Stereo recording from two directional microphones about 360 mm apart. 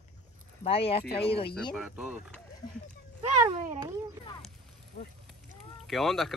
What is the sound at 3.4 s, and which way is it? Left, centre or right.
Speech, centre.